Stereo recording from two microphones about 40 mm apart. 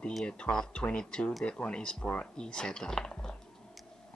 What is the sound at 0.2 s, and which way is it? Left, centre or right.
Speech, left.